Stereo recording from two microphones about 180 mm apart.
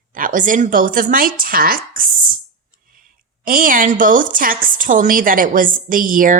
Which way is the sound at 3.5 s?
50° right (ahead or behind).